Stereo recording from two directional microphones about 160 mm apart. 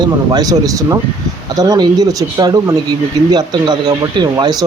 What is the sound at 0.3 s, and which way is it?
Speech, 25° right (ahead or behind).